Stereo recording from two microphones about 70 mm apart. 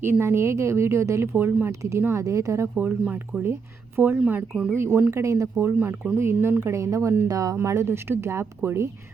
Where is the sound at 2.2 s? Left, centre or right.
Right.